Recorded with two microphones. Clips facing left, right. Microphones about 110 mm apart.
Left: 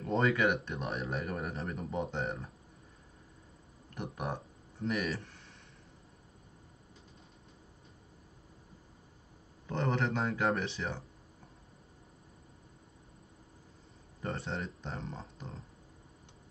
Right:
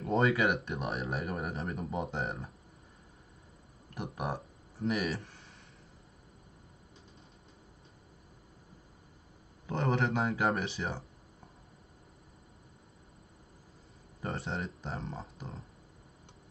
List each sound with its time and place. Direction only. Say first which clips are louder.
0.0 s speech: right 1 dB; centre (ahead or behind)
3.9 s speech: right 2 dB; 5° right (ahead or behind)
9.7 s speech: right 2 dB; 5° right (ahead or behind)
14.2 s speech: right 1 dB; 5° right (ahead or behind)